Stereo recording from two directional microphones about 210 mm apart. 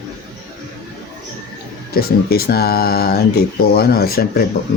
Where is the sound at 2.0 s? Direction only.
45° left (ahead or behind).